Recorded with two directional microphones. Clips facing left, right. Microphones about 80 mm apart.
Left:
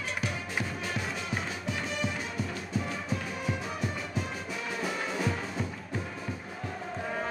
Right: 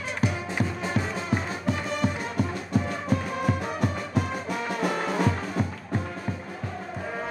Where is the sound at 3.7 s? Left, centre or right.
Right.